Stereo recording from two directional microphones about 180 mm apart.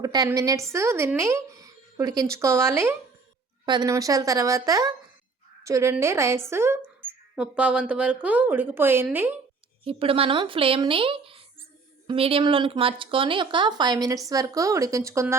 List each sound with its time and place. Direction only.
0.0 s a sound: 20° right (ahead or behind)
0.3 s a woman's voice: 20° right (ahead or behind)
9.8 s speech: 30° right (ahead or behind)